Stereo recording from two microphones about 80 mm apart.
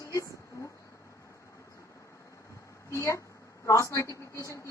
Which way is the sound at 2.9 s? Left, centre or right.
Left.